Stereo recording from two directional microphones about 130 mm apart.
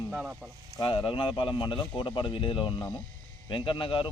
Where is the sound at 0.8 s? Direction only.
40° left (ahead or behind).